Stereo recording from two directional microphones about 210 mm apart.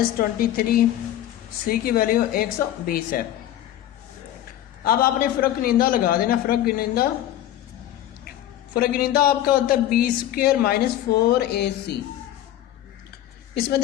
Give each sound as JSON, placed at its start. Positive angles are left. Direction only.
{"t": 0.2, "sound": "speech", "side_deg": 45}
{"t": 4.8, "sound": "speech", "side_deg": 45}
{"t": 8.7, "sound": "speech", "side_deg": 45}
{"t": 13.5, "sound": "a woman's voice", "side_deg": 50}